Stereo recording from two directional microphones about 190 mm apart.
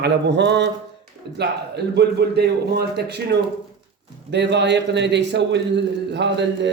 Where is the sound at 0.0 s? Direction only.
65° right (ahead or behind).